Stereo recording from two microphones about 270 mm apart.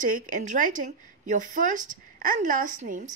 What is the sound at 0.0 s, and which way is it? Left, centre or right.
A woman's voice, right.